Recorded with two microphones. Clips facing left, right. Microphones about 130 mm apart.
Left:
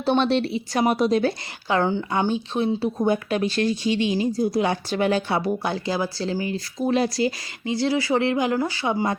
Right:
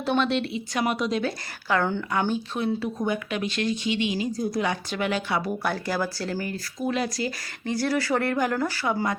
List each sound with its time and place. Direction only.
0.0 s speech: 30° left (ahead or behind)
1.6 s speech: 20° left (ahead or behind)
5.6 s speech: 20° left (ahead or behind)
6.7 s speech: 30° left (ahead or behind)
7.6 s speech: 15° left (ahead or behind)